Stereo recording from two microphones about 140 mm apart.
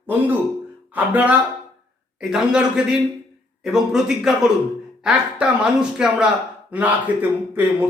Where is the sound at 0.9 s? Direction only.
10° right (ahead or behind).